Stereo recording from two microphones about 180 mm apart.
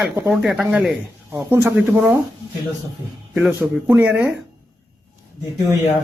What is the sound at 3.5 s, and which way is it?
Speech, 10° right (ahead or behind).